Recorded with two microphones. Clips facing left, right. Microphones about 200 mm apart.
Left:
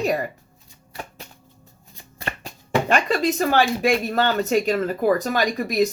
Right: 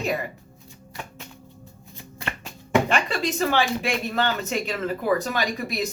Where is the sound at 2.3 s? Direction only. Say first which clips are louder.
Right 2 dB; 40° left (ahead or behind).